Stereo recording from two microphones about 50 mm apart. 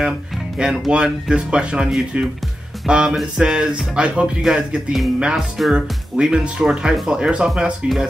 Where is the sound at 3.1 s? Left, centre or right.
Centre.